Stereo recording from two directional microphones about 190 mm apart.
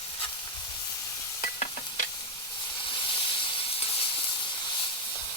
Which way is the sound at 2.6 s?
25° left (ahead or behind).